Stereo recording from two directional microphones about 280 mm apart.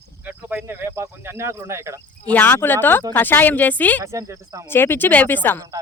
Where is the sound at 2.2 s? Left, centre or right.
Centre.